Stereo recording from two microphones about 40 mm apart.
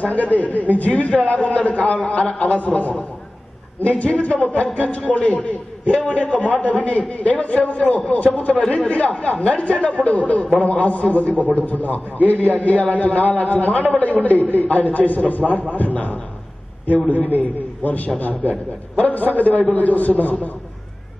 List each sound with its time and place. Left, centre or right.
0.0 s a man's voice: left